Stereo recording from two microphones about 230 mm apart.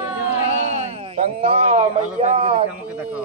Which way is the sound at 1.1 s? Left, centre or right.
Right.